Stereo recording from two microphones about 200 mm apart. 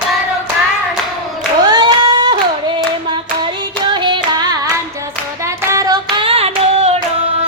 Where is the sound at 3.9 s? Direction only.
20° right (ahead or behind).